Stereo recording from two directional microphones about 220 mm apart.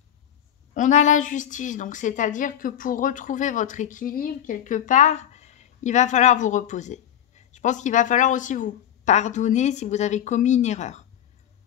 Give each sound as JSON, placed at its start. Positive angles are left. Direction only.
{"t": 0.7, "sound": "a woman's voice", "side_deg": 35}